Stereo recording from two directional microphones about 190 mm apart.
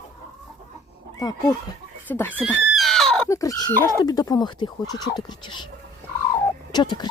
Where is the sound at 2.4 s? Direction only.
Centre (ahead or behind).